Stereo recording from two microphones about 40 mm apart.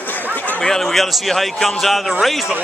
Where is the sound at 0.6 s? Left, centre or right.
Centre.